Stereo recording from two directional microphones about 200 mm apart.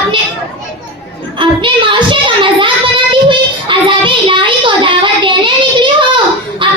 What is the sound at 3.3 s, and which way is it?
Child singing, 25° right (ahead or behind).